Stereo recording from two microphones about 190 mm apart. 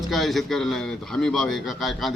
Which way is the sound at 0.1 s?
Centre (ahead or behind).